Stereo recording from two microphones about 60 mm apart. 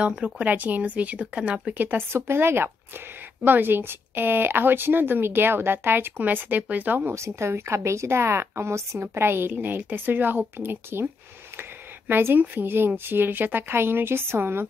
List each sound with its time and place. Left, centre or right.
0.0 s speech: centre
0.5 s speech: right
1.7 s a woman's voice: right
2.1 s a woman's voice: right
7.1 s a woman's voice: right
12.1 s a woman's voice: right